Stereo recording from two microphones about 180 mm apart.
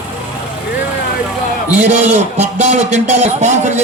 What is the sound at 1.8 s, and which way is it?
A man's voice, 40° right (ahead or behind).